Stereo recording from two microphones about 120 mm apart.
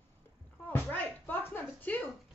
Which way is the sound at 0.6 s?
15° left (ahead or behind).